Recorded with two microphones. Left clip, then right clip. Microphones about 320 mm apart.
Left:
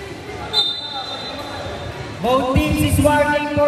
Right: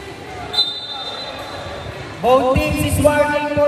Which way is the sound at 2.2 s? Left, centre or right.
Centre.